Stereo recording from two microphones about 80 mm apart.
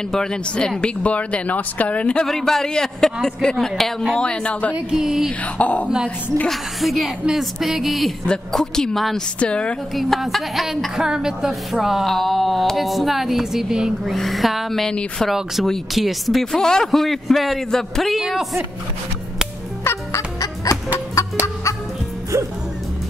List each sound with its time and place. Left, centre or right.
0.1 s speech: centre
2.2 s a woman's voice: centre
4.7 s a sound: centre
5.4 s speech: centre
6.5 s a woman's voice: centre
8.3 s a woman's voice: centre
9.9 s a woman's voice: centre
19.8 s fowl: left